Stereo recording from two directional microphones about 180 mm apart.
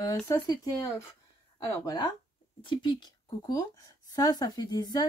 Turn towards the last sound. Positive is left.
turn(degrees=20)  # may be behind; listen again after turning